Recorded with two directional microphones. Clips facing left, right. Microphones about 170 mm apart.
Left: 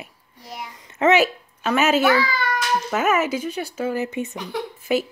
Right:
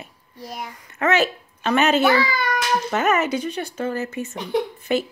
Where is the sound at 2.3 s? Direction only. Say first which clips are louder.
Right 1 dB; 15° right (ahead or behind).